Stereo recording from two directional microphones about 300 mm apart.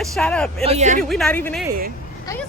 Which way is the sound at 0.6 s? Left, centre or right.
Right.